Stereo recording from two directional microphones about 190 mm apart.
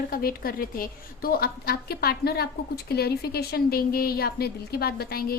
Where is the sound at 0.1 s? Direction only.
50° left (ahead or behind).